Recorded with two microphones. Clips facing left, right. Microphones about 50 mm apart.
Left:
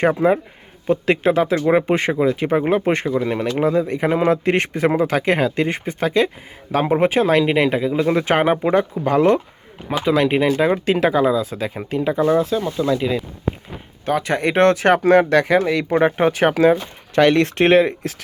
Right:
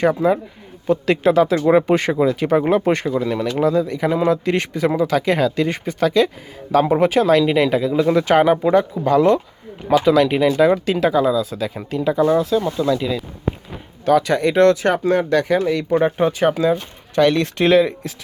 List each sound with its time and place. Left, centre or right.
0.0 s a man's voice: left
10.0 s a man's voice: centre
10.9 s a man's voice: left; by 14.4 s centre
14.4 s speech: left